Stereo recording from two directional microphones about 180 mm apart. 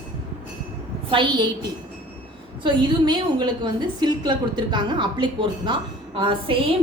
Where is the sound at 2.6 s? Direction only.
25° right (ahead or behind).